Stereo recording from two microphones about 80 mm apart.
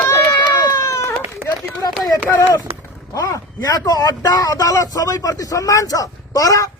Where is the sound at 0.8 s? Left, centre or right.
Left.